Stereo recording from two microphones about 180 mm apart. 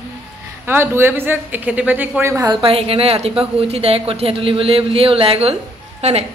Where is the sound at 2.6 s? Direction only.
30° right (ahead or behind).